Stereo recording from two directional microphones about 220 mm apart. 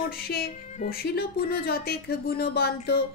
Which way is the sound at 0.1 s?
45° left (ahead or behind).